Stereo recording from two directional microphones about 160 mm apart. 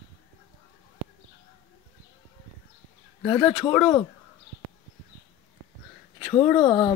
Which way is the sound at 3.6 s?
20° left (ahead or behind).